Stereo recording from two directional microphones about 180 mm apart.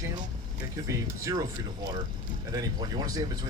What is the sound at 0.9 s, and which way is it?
Speech, 15° right (ahead or behind).